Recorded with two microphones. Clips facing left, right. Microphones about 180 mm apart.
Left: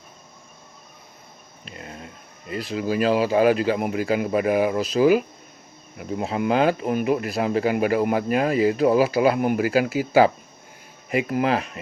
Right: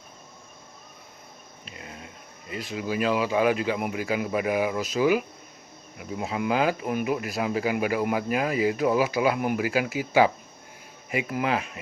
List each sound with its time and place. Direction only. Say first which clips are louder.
2.5 s speech: left 5 dB; 40° left (ahead or behind)
3.9 s speech: left 5 dB; 45° left (ahead or behind)
6.8 s speech: left 4 dB; 30° left (ahead or behind)
7.3 s speech: left 4 dB; 45° left (ahead or behind)